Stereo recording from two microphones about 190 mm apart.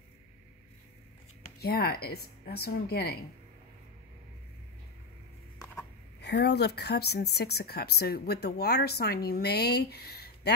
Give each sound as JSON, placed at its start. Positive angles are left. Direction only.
{"t": 1.6, "sound": "a woman's voice", "side_deg": 55}
{"t": 6.2, "sound": "a woman's voice", "side_deg": 60}